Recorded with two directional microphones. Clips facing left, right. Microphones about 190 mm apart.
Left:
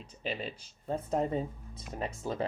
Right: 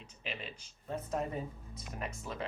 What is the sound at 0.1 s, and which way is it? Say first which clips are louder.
Speech: left 7 dB; 35° left (ahead or behind).